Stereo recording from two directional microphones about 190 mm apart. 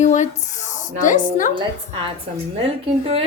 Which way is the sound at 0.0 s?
40° left (ahead or behind).